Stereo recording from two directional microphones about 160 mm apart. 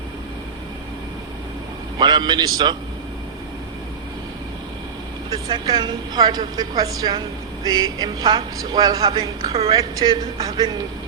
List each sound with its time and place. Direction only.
2.0 s speech: 25° right (ahead or behind)
5.3 s speech: 25° right (ahead or behind)
9.5 s a woman's voice: 40° right (ahead or behind)
9.7 s speech: 25° right (ahead or behind)